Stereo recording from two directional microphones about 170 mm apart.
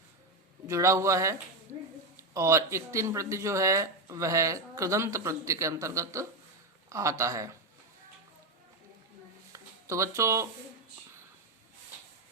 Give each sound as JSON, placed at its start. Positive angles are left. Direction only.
{"t": 0.7, "sound": "speech", "side_deg": -15}
{"t": 9.5, "sound": "speech", "side_deg": -15}